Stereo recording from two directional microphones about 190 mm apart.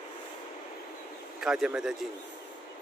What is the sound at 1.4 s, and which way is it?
Speech, 5° right (ahead or behind).